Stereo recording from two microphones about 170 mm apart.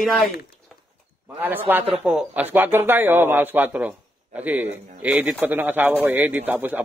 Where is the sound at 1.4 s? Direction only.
10° right (ahead or behind).